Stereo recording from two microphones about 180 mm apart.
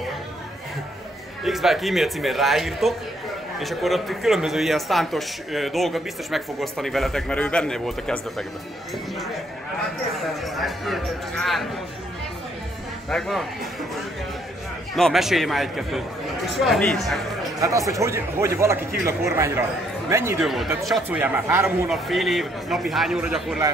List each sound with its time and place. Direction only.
1.4 s a man's voice: centre (ahead or behind)
10.1 s a man's voice: centre (ahead or behind)
13.1 s a man's voice: centre (ahead or behind)
15.0 s a man's voice: centre (ahead or behind)
17.6 s a man's voice: 20° right (ahead or behind)
20.3 s a man's voice: centre (ahead or behind)